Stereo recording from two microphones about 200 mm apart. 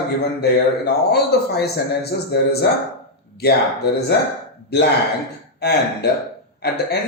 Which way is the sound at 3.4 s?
55° left (ahead or behind).